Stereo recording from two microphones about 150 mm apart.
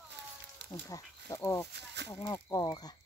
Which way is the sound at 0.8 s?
25° left (ahead or behind).